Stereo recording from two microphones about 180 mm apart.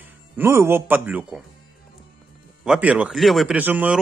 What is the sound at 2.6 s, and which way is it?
Speech, 5° right (ahead or behind).